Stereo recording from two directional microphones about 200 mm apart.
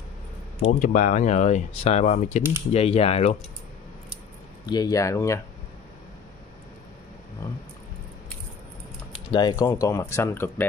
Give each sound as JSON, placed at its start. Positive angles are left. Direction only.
{"t": 0.7, "sound": "speech", "side_deg": 40}
{"t": 4.6, "sound": "speech", "side_deg": 20}
{"t": 9.1, "sound": "speech", "side_deg": 20}